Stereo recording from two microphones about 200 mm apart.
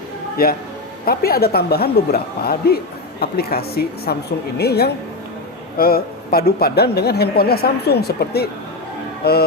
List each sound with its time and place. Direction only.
0.4 s a woman's voice: 50° left (ahead or behind)